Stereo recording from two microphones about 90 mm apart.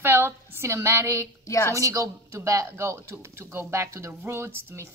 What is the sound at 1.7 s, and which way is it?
A woman's voice, 35° right (ahead or behind).